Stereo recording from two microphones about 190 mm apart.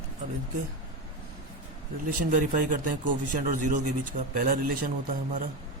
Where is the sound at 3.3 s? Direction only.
40° right (ahead or behind).